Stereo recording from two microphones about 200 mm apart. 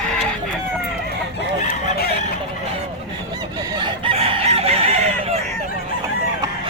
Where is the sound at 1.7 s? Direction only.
50° left (ahead or behind).